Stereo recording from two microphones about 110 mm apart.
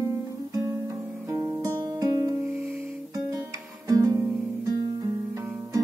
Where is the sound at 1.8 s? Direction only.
35° right (ahead or behind).